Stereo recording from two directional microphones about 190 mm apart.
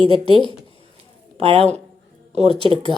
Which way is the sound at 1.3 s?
30° right (ahead or behind).